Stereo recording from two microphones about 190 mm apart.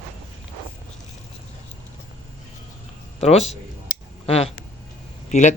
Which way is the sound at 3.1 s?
35° left (ahead or behind).